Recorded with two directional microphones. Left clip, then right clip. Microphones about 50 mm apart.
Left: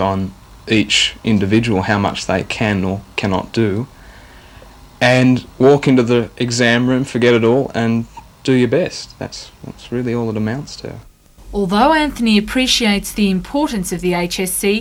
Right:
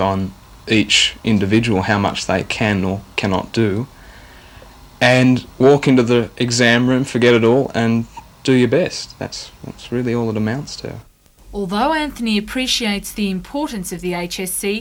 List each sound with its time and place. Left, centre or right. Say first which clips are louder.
0.0 s speech: left 1 dB; right
4.9 s speech: even; right